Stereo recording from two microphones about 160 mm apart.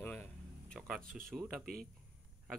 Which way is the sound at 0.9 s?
5° right (ahead or behind).